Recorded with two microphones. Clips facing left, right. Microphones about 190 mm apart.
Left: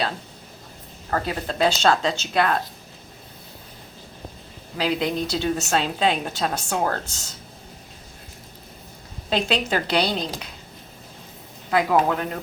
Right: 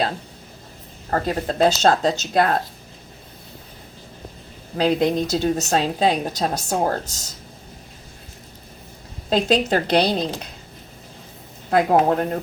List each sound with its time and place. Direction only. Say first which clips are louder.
1.1 s a woman's voice: right 4 dB; 40° right (ahead or behind)
4.8 s a woman's voice: right 5 dB; 45° right (ahead or behind)
9.3 s a woman's voice: right 5 dB; 40° right (ahead or behind)
11.7 s speech: right 3 dB; 45° right (ahead or behind)